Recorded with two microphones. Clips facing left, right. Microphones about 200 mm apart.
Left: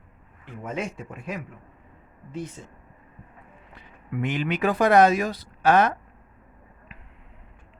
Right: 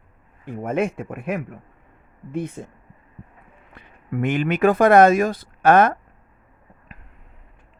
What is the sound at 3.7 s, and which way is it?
Speech, 50° right (ahead or behind).